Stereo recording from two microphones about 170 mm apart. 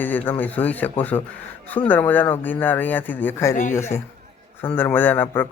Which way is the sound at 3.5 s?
45° left (ahead or behind).